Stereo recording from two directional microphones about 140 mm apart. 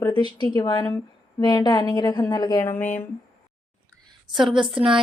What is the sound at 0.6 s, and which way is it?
A woman's voice, 30° left (ahead or behind).